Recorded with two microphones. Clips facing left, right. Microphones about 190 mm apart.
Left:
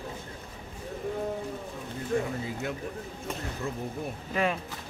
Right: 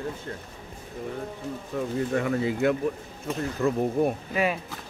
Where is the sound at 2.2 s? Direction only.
80° right.